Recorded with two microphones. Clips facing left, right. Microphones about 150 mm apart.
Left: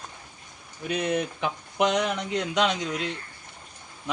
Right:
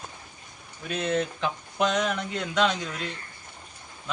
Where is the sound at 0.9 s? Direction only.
15° left (ahead or behind).